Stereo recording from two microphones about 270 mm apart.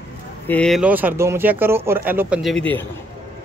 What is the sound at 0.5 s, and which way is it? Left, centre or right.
Speech, centre.